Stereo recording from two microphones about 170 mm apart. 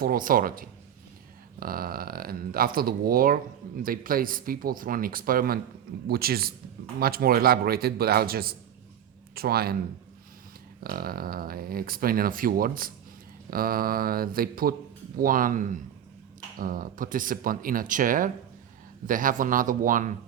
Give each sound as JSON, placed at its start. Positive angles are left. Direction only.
{"t": 0.0, "sound": "speech", "side_deg": -55}
{"t": 10.8, "sound": "speech", "side_deg": -60}